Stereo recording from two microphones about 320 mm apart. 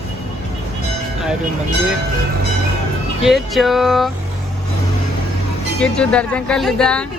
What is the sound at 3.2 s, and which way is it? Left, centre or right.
Speech, centre.